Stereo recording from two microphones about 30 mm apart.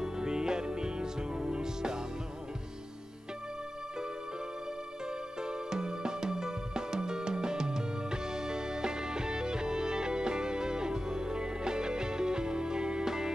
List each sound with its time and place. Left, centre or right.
0.0 s music: right
5.5 s music: right